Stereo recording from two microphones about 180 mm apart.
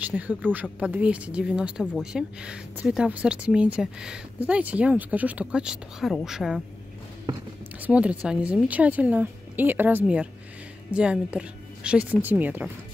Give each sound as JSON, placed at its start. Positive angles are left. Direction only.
{"t": 0.0, "sound": "a woman's voice", "side_deg": -10}
{"t": 7.3, "sound": "speech", "side_deg": -30}
{"t": 7.8, "sound": "a woman's voice", "side_deg": -5}